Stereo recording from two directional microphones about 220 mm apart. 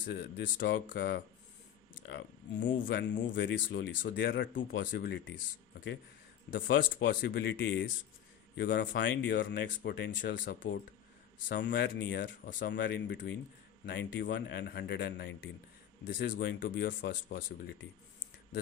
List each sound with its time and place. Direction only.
0.0 s speech: 45° left (ahead or behind)
6.9 s speech: 40° left (ahead or behind)